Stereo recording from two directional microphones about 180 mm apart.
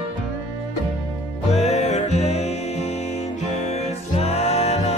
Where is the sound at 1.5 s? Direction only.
35° left (ahead or behind).